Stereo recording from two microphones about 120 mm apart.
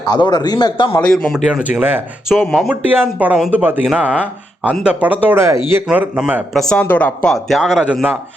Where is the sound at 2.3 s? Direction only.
Centre (ahead or behind).